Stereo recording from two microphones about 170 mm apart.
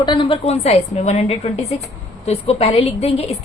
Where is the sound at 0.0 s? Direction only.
30° left (ahead or behind).